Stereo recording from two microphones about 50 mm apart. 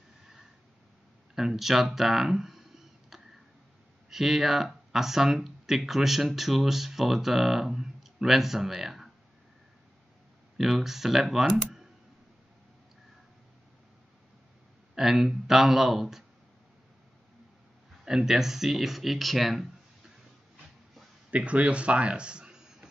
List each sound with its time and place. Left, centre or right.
1.3 s speech: centre
10.6 s speech: centre
15.0 s speech: centre
18.0 s speech: centre
21.3 s speech: right